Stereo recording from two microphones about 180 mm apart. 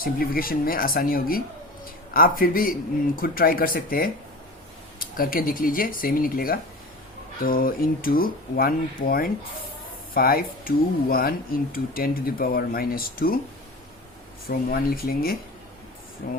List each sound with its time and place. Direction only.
0.0 s speech: 55° left (ahead or behind)
14.7 s speech: 55° left (ahead or behind)